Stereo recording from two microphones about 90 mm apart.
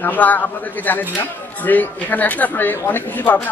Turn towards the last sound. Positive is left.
turn(degrees=20)  # may be behind; listen again after turning